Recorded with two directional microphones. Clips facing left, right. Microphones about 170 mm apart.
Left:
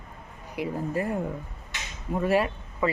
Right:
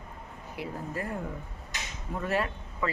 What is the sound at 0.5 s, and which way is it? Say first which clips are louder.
Speech: left 7 dB; 15° left (ahead or behind).